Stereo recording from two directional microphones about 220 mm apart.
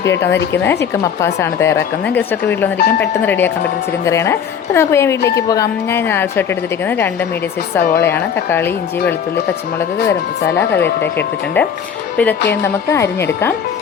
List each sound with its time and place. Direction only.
0.0 s a woman's voice: 50° left (ahead or behind)
0.5 s a woman's voice: 10° left (ahead or behind)
2.7 s speech: 50° left (ahead or behind)
3.2 s a woman's voice: 10° left (ahead or behind)
10.8 s speech: 50° left (ahead or behind)
12.1 s a woman's voice: 5° left (ahead or behind)